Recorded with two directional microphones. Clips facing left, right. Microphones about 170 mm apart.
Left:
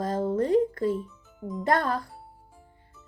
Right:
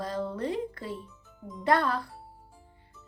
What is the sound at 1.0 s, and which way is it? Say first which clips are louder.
Music: left 8 dB; centre (ahead or behind).